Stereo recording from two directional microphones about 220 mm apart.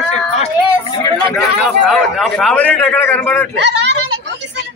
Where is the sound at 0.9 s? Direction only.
20° left (ahead or behind).